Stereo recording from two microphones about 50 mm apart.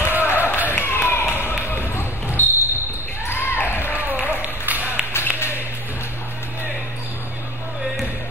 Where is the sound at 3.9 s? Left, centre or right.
Right.